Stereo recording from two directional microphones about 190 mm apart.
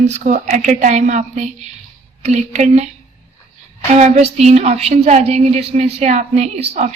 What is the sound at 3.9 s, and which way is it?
A woman's voice, 35° right (ahead or behind).